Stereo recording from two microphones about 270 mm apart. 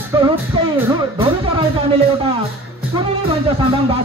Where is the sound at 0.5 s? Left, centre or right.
Centre.